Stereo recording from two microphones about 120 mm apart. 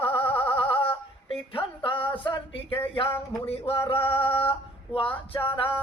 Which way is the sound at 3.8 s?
50° left (ahead or behind).